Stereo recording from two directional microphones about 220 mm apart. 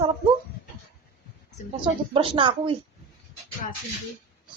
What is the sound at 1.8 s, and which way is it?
Speech, 25° right (ahead or behind).